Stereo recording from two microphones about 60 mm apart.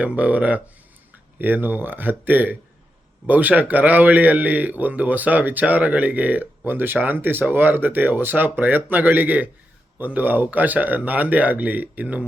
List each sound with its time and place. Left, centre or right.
0.0 s a man's voice: right